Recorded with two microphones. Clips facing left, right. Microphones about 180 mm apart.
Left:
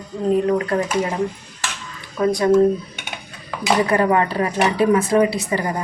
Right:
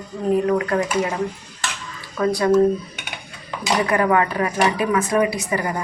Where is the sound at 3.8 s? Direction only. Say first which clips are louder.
Even; 30° left (ahead or behind).